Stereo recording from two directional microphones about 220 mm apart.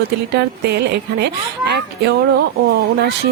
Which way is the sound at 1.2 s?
50° right (ahead or behind).